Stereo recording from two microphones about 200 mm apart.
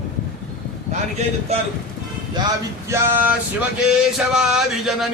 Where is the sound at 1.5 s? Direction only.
30° right (ahead or behind).